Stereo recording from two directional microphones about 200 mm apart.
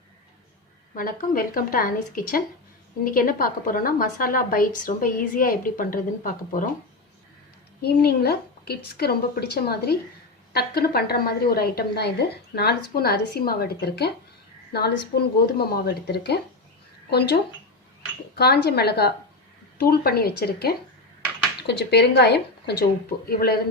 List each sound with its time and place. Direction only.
0.9 s a woman's voice: 45° left (ahead or behind)
7.8 s a woman's voice: 55° left (ahead or behind)